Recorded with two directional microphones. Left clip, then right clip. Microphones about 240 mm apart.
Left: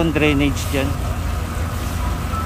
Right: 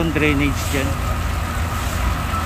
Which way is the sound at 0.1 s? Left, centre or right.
Centre.